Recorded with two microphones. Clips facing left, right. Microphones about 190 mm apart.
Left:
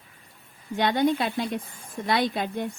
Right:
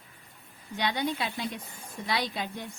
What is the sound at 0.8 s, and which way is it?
A woman's voice, 50° left (ahead or behind).